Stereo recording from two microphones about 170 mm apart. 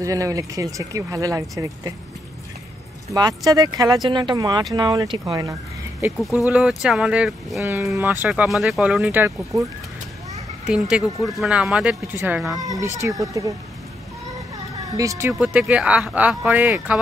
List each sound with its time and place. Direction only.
0.0 s speech: 20° right (ahead or behind)
3.1 s speech: 20° right (ahead or behind)
6.4 s speech: 5° right (ahead or behind)
10.7 s speech: 5° right (ahead or behind)
12.5 s speech: 20° right (ahead or behind)
15.0 s speech: 15° right (ahead or behind)
15.3 s speech: 5° right (ahead or behind)